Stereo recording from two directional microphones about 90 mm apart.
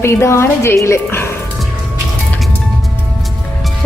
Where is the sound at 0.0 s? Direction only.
30° left (ahead or behind).